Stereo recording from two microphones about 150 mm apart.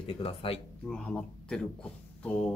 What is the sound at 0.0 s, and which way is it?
Speech, 40° left (ahead or behind).